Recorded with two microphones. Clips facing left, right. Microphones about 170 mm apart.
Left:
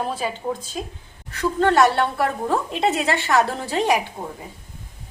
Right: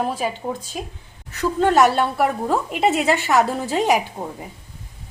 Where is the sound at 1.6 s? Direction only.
15° right (ahead or behind).